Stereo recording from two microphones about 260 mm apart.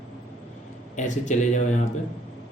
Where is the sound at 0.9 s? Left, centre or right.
Left.